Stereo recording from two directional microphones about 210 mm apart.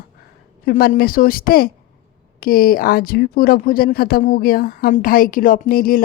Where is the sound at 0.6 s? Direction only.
45° left (ahead or behind).